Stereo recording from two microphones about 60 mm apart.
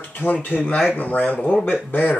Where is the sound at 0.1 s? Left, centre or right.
Left.